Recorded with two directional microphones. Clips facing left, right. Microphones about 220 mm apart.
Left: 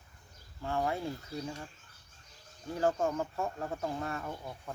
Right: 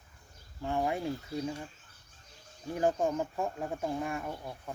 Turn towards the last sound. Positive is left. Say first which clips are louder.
# right 1 dB
turn(degrees=-10)  # may be behind; listen again after turning